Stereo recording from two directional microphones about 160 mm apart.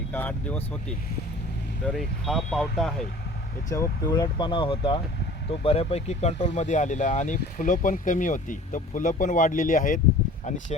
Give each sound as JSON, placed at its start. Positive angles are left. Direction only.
{"t": 0.1, "sound": "speech", "side_deg": 10}
{"t": 3.7, "sound": "speech", "side_deg": 25}